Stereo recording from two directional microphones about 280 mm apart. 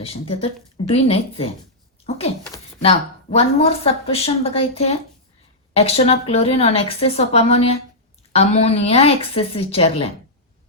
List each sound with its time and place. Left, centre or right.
0.0 s a woman's voice: left